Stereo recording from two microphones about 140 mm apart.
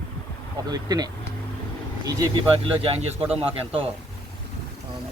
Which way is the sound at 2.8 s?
45° right (ahead or behind).